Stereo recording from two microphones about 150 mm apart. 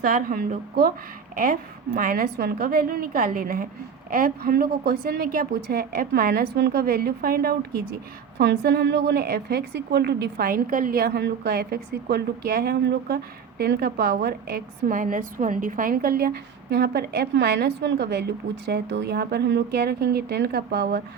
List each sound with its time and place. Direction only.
0.0 s a woman's voice: 65° right (ahead or behind); by 0.9 s 85° right
1.4 s a woman's voice: 65° right (ahead or behind); by 21.0 s 90° right